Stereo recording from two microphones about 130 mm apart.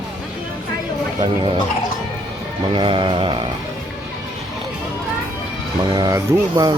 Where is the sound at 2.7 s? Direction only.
40° right (ahead or behind).